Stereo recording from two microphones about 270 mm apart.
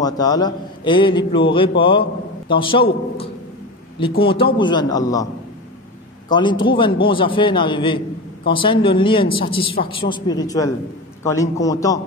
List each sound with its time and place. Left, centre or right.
0.0 s a man's voice: centre